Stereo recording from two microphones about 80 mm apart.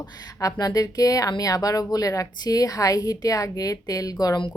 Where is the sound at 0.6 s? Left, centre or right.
Left.